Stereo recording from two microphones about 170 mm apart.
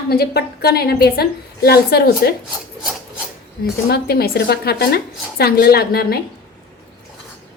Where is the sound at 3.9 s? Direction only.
65° left (ahead or behind).